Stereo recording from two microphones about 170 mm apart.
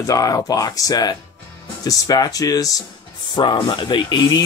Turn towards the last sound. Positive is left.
turn(degrees=25)  # may be behind; listen again after turning